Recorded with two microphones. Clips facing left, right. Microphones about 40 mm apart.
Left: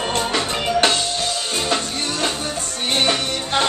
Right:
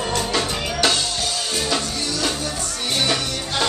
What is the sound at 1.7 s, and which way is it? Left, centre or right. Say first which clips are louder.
Music: left 1 dB; left.